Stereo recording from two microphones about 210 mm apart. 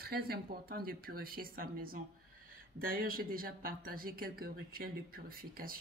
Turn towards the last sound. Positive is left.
turn(degrees=-45)  # may be behind; listen again after turning